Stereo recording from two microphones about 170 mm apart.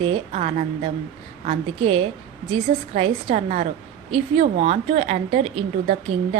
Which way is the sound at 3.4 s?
45° right (ahead or behind).